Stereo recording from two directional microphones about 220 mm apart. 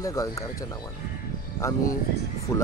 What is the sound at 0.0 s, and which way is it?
Speech, 15° left (ahead or behind).